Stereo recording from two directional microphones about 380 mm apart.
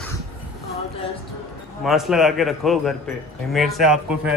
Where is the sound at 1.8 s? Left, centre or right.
Centre.